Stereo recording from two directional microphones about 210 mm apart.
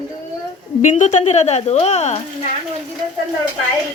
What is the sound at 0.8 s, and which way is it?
Speech, 35° left (ahead or behind).